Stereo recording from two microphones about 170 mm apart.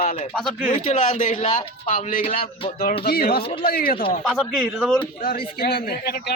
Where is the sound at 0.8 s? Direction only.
45° left (ahead or behind).